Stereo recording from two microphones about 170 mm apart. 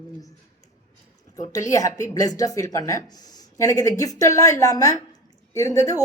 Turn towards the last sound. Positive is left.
turn(degrees=20)  # may be behind; listen again after turning